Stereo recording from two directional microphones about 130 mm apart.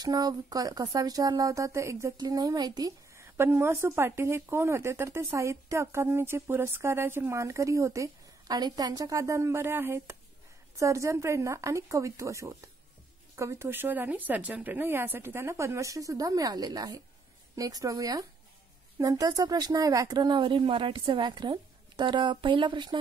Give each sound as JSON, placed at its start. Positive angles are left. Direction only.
{"t": 0.0, "sound": "speech", "side_deg": -30}
{"t": 3.3, "sound": "speech", "side_deg": -15}